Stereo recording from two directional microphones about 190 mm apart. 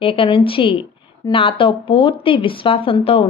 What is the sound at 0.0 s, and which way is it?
A woman's voice, 30° left (ahead or behind).